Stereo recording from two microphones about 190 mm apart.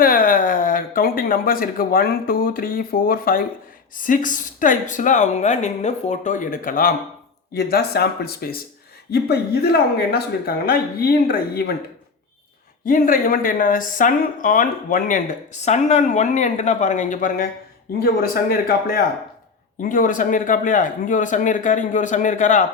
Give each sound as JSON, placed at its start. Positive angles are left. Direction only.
{"t": 0.0, "sound": "speech", "side_deg": 50}
{"t": 12.8, "sound": "speech", "side_deg": 45}